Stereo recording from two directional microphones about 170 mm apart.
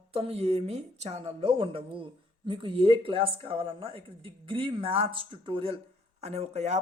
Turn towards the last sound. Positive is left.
turn(degrees=-40)  # may be behind; listen again after turning